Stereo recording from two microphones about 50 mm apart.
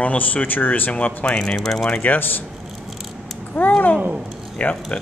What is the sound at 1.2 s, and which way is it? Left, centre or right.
Speech, centre.